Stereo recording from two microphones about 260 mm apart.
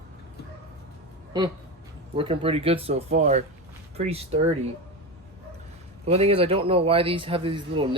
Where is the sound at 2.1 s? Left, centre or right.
Right.